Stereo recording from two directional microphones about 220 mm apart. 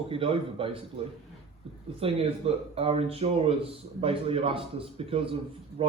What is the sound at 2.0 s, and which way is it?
A man's voice, 25° right (ahead or behind).